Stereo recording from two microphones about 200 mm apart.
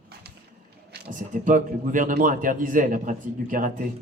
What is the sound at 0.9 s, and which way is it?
Speech, 40° right (ahead or behind).